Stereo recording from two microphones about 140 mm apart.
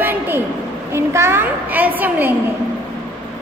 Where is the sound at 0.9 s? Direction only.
20° right (ahead or behind).